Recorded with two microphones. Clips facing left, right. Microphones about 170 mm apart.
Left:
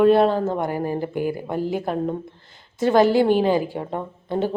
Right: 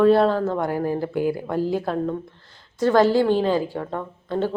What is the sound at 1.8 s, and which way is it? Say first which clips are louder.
A woman's voice: even; 20° left (ahead or behind).